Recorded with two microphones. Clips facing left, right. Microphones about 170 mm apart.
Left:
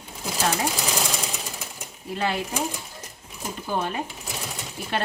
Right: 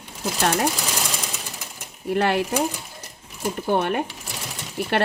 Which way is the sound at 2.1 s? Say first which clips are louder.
Right 6 dB; 65° right (ahead or behind).